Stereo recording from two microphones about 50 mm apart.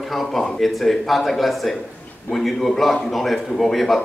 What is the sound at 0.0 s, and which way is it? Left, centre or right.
A man's voice, centre.